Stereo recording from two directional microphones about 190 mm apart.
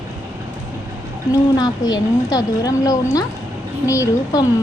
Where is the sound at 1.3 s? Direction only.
20° left (ahead or behind).